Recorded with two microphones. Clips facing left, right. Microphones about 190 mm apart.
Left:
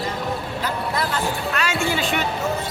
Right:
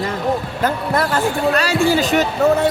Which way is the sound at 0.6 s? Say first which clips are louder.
Right 7 dB; 55° right (ahead or behind).